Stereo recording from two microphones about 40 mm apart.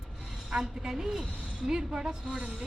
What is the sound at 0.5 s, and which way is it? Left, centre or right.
Speech, centre.